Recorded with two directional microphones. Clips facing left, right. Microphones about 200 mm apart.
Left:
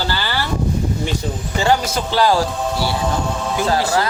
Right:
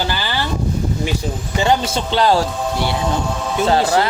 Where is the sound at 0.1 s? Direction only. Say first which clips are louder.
Even; 15° right (ahead or behind).